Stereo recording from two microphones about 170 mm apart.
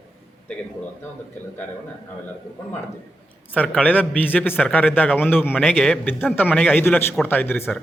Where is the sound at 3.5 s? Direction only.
10° left (ahead or behind).